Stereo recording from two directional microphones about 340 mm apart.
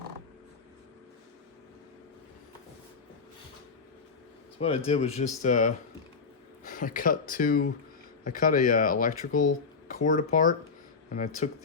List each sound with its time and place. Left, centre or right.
4.6 s speech: centre